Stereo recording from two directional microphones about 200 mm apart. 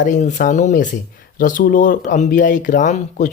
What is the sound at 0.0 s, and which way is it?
Speech, 35° left (ahead or behind).